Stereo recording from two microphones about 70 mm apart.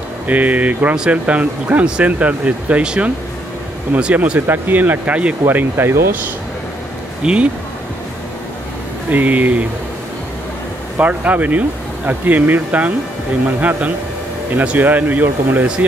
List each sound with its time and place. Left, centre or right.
0.3 s speech: right
7.2 s speech: centre
9.1 s speech: right
11.0 s speech: right